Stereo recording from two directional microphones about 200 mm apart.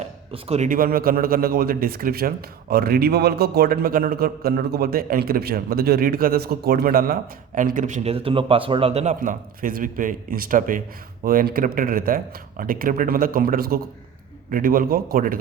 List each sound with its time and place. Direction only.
0.0 s a man's voice: 35° right (ahead or behind)